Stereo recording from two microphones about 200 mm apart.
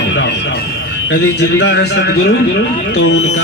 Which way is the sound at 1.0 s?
60° left (ahead or behind).